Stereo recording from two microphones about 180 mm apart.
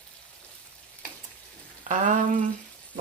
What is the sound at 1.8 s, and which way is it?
Frying, 40° right (ahead or behind).